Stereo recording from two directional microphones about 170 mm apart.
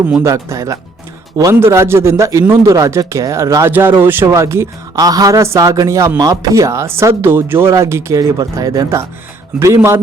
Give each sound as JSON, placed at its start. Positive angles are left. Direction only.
{"t": 0.2, "sound": "speech", "side_deg": -15}